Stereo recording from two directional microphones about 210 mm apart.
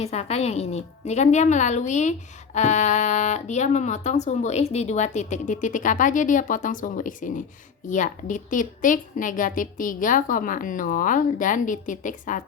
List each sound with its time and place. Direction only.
0.0 s a woman's voice: 30° left (ahead or behind)